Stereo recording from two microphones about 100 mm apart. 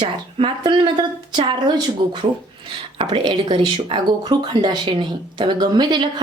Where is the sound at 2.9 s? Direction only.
60° right (ahead or behind).